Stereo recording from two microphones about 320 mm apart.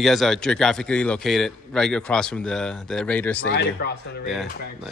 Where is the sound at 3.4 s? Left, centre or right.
Left.